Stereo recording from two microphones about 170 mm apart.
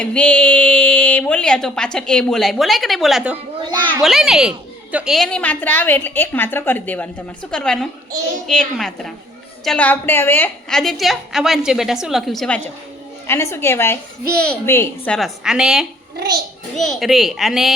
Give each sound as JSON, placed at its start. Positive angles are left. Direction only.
{"t": 0.0, "sound": "a woman's voice", "side_deg": 5}
{"t": 13.2, "sound": "a woman's voice", "side_deg": 15}
{"t": 16.1, "sound": "a child's voice", "side_deg": -70}
{"t": 16.7, "sound": "a woman's voice", "side_deg": 0}